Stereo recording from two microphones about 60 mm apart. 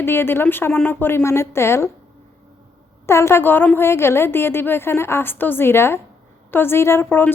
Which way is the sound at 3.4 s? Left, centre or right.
Left.